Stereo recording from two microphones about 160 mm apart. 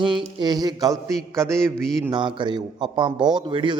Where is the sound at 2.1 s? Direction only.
30° right (ahead or behind).